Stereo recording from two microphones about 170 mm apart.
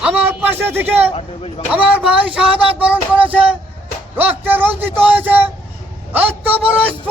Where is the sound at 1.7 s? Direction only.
5° right (ahead or behind).